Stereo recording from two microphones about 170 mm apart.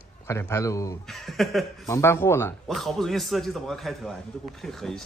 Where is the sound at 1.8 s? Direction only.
15° left (ahead or behind).